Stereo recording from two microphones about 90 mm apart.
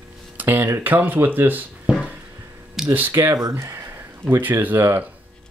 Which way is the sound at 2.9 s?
25° right (ahead or behind).